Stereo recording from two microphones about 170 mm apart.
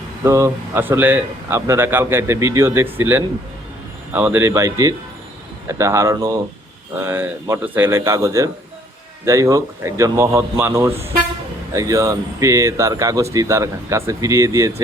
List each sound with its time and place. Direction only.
0.3 s speech: 15° right (ahead or behind)